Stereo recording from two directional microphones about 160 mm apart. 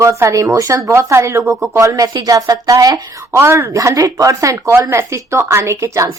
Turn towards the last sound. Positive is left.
turn(degrees=-20)  # may be behind; listen again after turning